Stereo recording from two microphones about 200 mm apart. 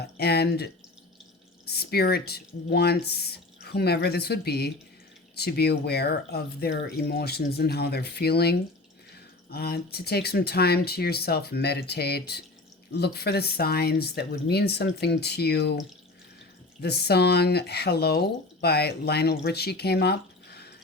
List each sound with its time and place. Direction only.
0.0 s speech: 55° left (ahead or behind)
16.8 s speech: 55° left (ahead or behind)